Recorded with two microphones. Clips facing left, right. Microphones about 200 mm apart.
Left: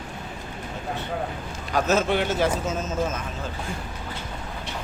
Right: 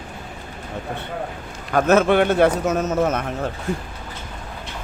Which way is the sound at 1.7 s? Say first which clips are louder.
Right 6 dB; 55° right (ahead or behind).